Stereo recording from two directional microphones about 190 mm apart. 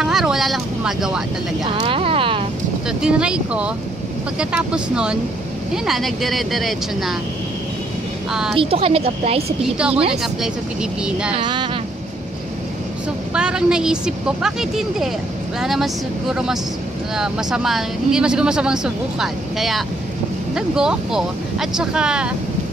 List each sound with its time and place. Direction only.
0.0 s vehicle: centre (ahead or behind)
1.7 s speech: 30° right (ahead or behind)
3.0 s speech: 5° right (ahead or behind)
8.3 s speech: centre (ahead or behind)
8.5 s a woman's voice: 30° right (ahead or behind)
9.8 s speech: 5° right (ahead or behind)
11.3 s a woman's voice: 25° right (ahead or behind)
13.3 s speech: 5° right (ahead or behind)